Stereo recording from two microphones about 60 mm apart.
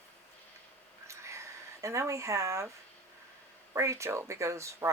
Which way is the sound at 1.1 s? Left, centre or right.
Right.